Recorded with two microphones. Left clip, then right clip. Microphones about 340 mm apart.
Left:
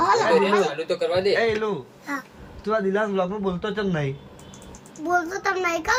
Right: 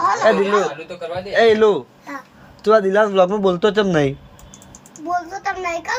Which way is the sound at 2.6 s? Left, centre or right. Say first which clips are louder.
Right 9 dB; centre.